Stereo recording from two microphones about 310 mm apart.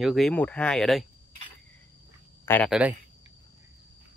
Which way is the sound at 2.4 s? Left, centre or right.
Centre.